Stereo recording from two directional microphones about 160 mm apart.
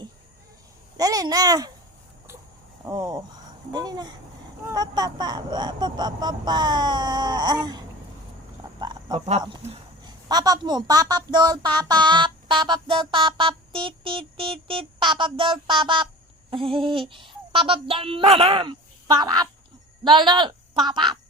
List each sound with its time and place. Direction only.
0.9 s speech: 25° right (ahead or behind)
2.8 s speech: 25° right (ahead or behind)
8.8 s duck: 25° right (ahead or behind)
10.0 s a woman's voice: 25° right (ahead or behind)
16.5 s a sound: 35° right (ahead or behind)
20.1 s speech: 30° right (ahead or behind)